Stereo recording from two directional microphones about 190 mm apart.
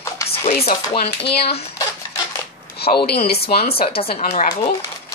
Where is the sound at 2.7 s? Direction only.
55° left (ahead or behind).